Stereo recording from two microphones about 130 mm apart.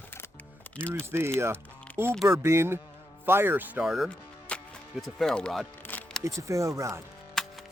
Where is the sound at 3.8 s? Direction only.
Centre (ahead or behind).